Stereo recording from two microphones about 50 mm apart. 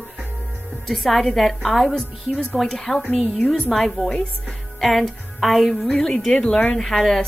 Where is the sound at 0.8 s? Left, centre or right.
Centre.